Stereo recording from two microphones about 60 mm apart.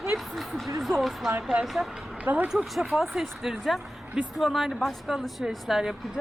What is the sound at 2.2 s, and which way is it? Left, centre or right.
Speech, right.